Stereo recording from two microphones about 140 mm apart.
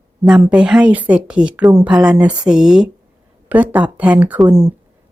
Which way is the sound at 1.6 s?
20° right (ahead or behind).